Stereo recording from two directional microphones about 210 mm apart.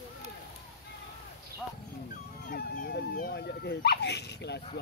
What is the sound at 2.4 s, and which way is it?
Dog, 45° left (ahead or behind).